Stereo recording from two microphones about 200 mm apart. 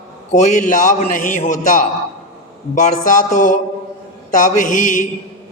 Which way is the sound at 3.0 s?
40° left (ahead or behind).